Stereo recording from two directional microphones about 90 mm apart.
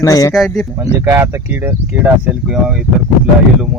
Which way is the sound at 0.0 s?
40° left (ahead or behind).